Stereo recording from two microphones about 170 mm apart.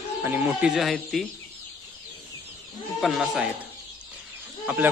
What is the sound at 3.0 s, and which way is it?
Speech, centre (ahead or behind).